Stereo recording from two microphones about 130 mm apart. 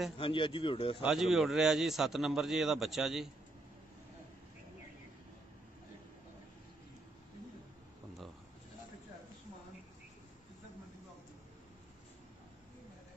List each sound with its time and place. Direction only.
0.2 s a man's voice: 40° left (ahead or behind)
1.0 s a man's voice: centre (ahead or behind)